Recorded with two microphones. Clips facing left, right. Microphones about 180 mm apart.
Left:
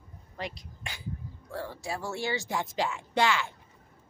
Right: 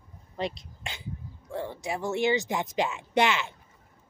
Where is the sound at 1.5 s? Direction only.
20° right (ahead or behind).